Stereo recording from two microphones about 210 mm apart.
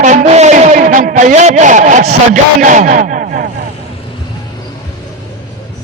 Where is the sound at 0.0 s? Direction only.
35° right (ahead or behind).